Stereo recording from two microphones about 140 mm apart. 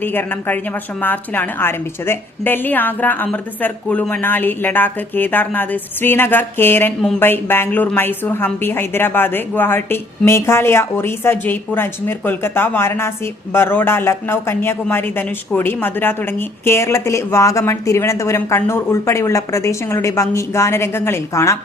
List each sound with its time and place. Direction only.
0.0 s a woman's voice: 15° left (ahead or behind)